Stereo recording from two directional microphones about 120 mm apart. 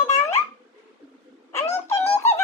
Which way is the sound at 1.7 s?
20° left (ahead or behind).